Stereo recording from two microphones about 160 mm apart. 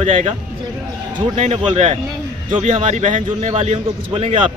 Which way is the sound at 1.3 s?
45° right (ahead or behind).